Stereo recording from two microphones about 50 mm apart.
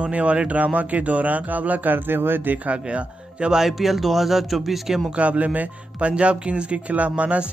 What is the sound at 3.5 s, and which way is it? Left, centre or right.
Speech, centre.